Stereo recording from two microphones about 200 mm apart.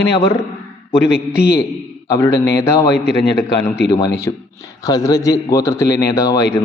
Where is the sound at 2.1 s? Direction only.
15° left (ahead or behind).